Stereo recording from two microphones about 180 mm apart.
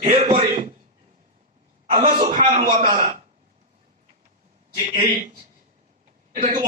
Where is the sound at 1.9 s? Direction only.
40° right (ahead or behind).